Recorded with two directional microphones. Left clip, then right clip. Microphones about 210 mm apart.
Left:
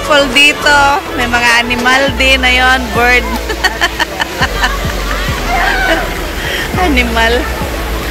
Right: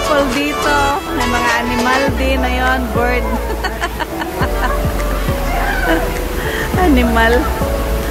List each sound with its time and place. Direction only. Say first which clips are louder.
0.1 s speech: left 10 dB; centre (ahead or behind)
7.0 s speech: left 4 dB; 15° right (ahead or behind)